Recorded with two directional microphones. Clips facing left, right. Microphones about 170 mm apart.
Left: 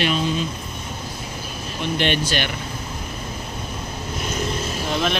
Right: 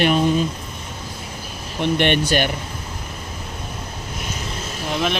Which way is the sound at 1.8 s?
55° right (ahead or behind).